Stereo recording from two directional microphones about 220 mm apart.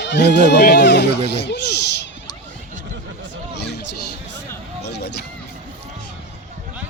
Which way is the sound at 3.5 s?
50° left (ahead or behind).